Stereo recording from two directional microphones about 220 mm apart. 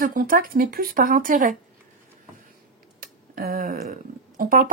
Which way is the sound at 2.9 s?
40° right (ahead or behind).